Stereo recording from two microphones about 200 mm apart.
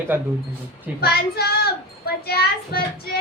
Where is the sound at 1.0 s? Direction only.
50° left (ahead or behind).